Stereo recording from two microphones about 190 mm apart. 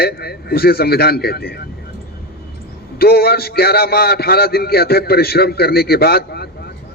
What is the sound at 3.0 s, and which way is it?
A man's voice, 55° left (ahead or behind).